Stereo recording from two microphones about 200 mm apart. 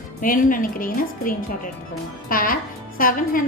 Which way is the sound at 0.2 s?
45° left (ahead or behind).